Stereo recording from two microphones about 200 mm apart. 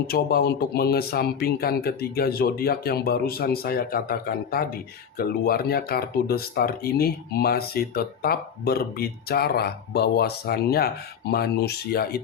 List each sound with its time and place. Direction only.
0.1 s speech: 50° left (ahead or behind)